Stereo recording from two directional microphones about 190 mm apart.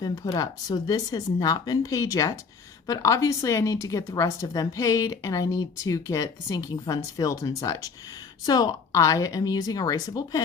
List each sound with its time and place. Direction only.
0.0 s a woman's voice: 20° left (ahead or behind)